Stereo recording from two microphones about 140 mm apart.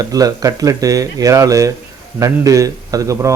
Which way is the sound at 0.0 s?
25° right (ahead or behind).